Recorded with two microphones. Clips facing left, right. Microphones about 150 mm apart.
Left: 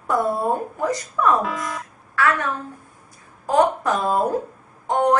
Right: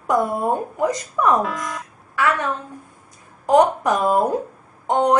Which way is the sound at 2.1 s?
15° right (ahead or behind).